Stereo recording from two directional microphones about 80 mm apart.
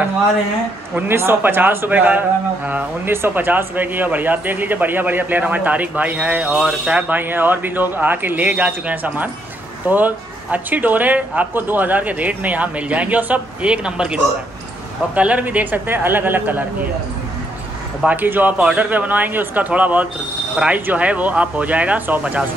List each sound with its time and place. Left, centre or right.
0.9 s speech: right
18.0 s speech: right